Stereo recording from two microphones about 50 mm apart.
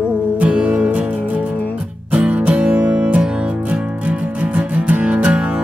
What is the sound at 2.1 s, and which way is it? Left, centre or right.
Music, right.